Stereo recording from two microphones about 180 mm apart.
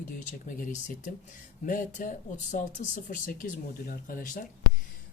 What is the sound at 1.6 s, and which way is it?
Speech, 45° left (ahead or behind).